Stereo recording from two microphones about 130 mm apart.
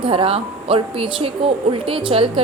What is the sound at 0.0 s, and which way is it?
A woman's voice, 45° right (ahead or behind).